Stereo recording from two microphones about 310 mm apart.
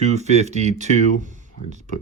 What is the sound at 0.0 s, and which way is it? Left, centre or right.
Speech, right.